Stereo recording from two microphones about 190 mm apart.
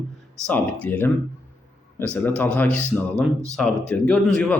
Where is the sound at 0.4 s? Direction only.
10° left (ahead or behind).